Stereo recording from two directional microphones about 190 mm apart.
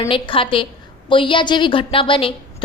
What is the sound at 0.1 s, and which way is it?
A woman's voice, 25° left (ahead or behind).